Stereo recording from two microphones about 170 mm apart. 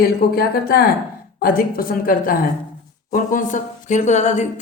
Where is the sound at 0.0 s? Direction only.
65° left (ahead or behind).